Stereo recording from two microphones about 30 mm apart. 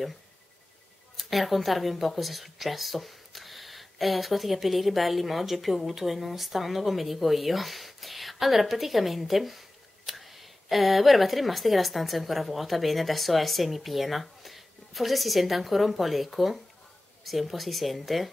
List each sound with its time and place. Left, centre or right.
1.1 s speech: centre